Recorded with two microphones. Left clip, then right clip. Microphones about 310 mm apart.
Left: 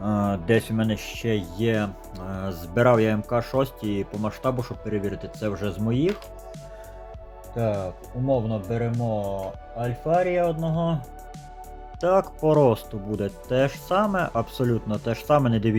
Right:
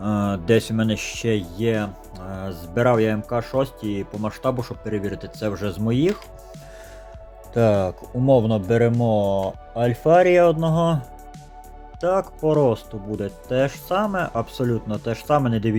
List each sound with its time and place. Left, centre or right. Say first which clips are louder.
0.0 s speech: right 1 dB; centre
7.5 s speech: right 8 dB; right
11.9 s speech: even; centre